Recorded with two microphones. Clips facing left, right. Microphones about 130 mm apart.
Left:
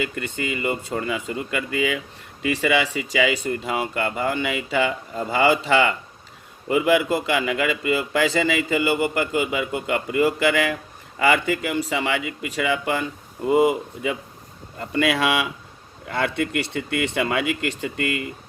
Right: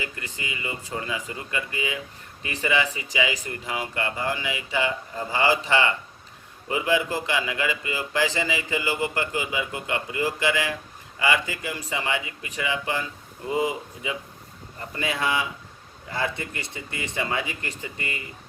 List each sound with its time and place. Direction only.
0.0 s speech: 65° left (ahead or behind)
14.8 s speech: 75° left (ahead or behind)